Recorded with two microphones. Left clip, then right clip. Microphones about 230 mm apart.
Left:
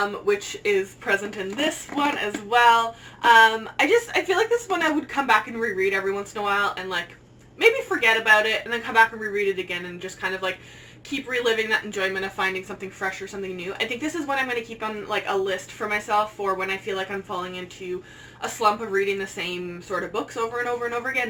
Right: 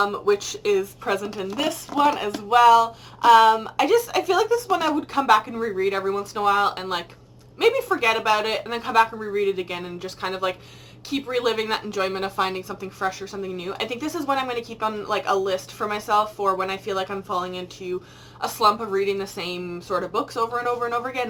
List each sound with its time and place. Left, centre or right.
0.3 s a woman's voice: centre